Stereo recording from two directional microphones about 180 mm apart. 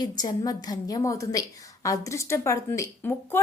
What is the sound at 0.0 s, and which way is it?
A woman's voice, 20° left (ahead or behind).